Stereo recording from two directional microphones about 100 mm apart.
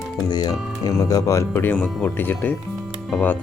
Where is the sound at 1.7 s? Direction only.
10° left (ahead or behind).